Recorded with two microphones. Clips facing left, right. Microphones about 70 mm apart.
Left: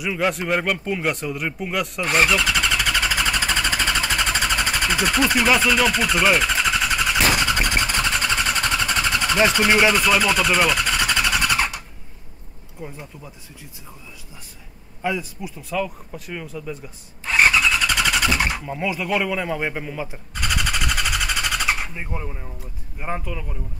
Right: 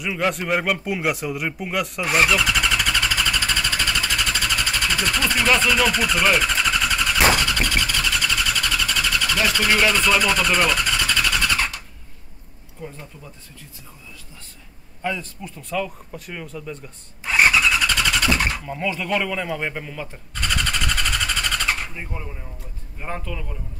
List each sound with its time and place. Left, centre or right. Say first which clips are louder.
0.0 s a sound: left 1 dB; centre
7.4 s vehicle: left 1 dB; left; by 11.0 s centre
11.0 s vehicle: left 1 dB; centre
12.8 s speech: left 1 dB; centre
15.0 s speech: left 2 dB; centre
17.2 s vehicle: even; centre
17.8 s vehicle: even; centre
22.9 s speech: left 2 dB; centre